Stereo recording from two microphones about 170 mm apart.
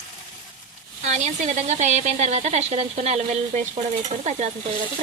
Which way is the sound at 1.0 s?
45° right (ahead or behind).